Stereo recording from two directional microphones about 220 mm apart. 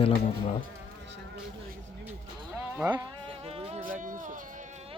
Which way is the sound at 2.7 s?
15° right (ahead or behind).